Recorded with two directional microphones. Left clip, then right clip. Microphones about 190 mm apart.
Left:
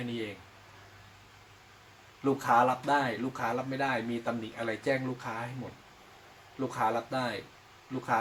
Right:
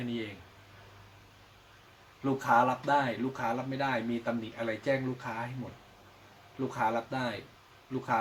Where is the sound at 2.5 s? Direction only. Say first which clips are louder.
Even; 10° left (ahead or behind).